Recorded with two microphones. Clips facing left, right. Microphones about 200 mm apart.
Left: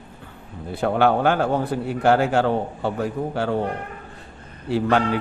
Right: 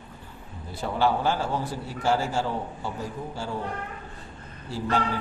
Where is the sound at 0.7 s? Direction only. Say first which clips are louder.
Left 6 dB; 60° left (ahead or behind).